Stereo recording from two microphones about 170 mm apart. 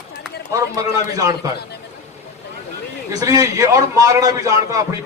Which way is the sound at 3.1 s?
20° right (ahead or behind).